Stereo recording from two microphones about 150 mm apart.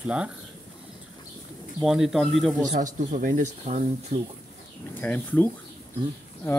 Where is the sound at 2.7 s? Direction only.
60° right (ahead or behind).